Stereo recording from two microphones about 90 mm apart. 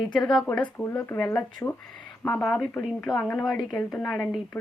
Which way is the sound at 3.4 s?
5° left (ahead or behind).